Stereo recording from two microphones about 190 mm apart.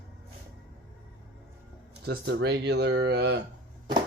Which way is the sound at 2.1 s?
65° right (ahead or behind).